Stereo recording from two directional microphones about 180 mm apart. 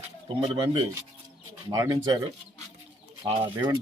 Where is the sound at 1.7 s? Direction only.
20° right (ahead or behind).